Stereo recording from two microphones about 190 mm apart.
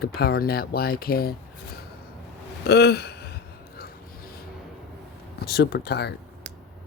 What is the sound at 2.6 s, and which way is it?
Gasp, 60° left (ahead or behind).